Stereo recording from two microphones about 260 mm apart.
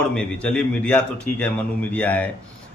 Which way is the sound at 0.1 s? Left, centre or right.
Centre.